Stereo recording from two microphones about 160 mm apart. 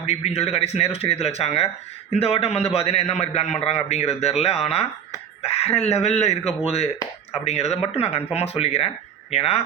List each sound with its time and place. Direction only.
0.0 s a man's voice: 40° left (ahead or behind)